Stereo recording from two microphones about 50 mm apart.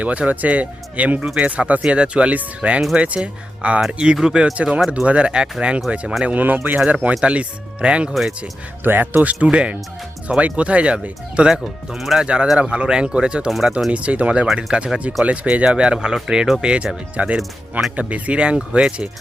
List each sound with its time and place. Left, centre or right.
0.0 s speech: right; by 4.5 s centre
4.5 s speech: right
6.2 s speech: right; by 8.1 s centre
8.8 s speech: right
9.3 s speech: right
11.9 s speech: centre
12.2 s speech: right
13.5 s speech: centre
13.9 s speech: right
17.3 s speech: centre
17.9 s speech: right